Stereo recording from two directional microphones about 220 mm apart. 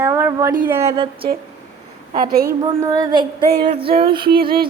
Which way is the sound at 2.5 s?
15° right (ahead or behind).